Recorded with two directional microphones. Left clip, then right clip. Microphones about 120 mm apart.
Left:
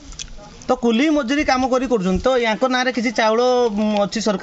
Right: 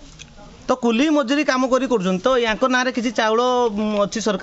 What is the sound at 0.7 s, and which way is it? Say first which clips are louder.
A man's voice: left 1 dB; 15° right (ahead or behind).